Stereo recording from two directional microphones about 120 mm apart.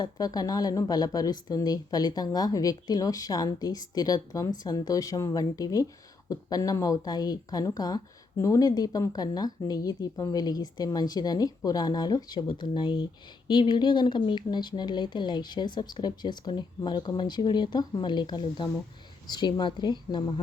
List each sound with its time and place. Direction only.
0.0 s a woman's voice: 30° left (ahead or behind)